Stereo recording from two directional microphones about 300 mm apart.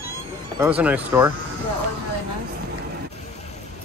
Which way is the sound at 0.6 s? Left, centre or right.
Centre.